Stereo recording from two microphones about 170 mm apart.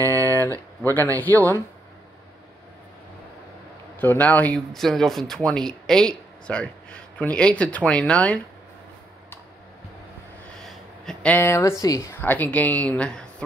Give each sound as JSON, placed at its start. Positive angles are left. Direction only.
{"t": 0.2, "sound": "a sound", "side_deg": 10}
{"t": 1.1, "sound": "speech", "side_deg": 10}
{"t": 4.0, "sound": "speech", "side_deg": 10}
{"t": 10.6, "sound": "speech", "side_deg": 5}